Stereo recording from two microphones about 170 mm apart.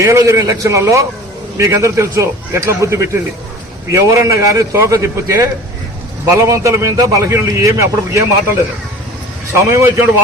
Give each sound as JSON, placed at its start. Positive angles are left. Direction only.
{"t": 0.0, "sound": "a man's voice", "side_deg": -15}
{"t": 9.6, "sound": "a man's voice", "side_deg": -15}